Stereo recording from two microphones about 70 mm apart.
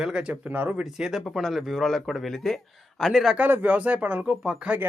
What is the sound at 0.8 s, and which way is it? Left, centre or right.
A man's voice, centre.